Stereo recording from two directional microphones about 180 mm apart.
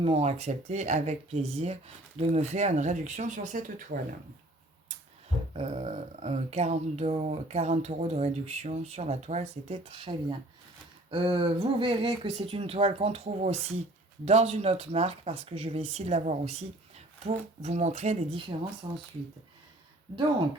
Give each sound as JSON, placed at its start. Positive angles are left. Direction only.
{"t": 0.0, "sound": "speech", "side_deg": -35}
{"t": 5.5, "sound": "speech", "side_deg": -40}